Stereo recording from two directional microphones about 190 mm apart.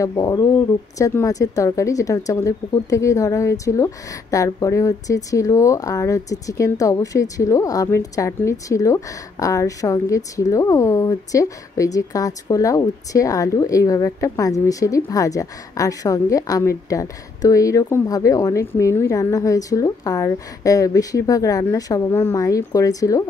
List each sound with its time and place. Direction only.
0.0 s a woman's voice: 20° left (ahead or behind)